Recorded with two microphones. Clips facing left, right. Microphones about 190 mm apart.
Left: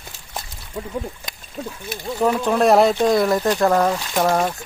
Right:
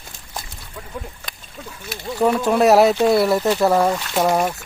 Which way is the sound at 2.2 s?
5° right (ahead or behind).